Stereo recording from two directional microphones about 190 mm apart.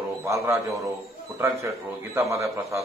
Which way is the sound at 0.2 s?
15° right (ahead or behind).